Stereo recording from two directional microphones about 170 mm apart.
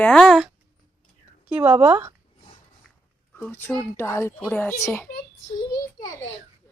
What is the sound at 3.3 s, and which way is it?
A child's voice, 10° left (ahead or behind).